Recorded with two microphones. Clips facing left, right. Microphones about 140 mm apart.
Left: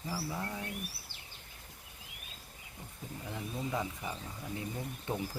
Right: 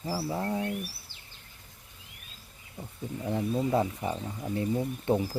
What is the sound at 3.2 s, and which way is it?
Speech, 35° right (ahead or behind).